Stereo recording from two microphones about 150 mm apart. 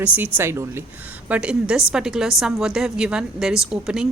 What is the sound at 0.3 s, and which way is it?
A woman's voice, 15° right (ahead or behind).